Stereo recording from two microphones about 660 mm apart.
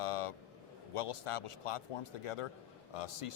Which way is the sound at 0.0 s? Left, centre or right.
Left.